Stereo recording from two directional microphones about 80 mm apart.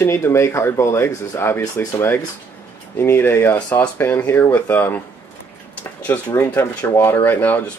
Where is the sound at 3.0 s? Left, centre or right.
Left.